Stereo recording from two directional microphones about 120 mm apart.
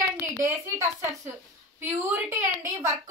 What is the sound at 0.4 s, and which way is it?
Speech, 25° right (ahead or behind).